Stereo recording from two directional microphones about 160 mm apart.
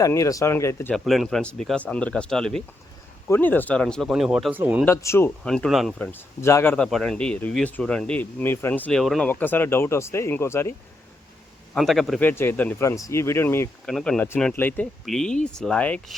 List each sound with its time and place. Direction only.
0.0 s speech: 20° left (ahead or behind)
0.9 s speech: centre (ahead or behind)
4.9 s speech: 15° left (ahead or behind)
5.4 s speech: 5° left (ahead or behind)
6.1 s speech: 15° left (ahead or behind)
11.7 s speech: centre (ahead or behind)
12.2 s speech: 15° left (ahead or behind)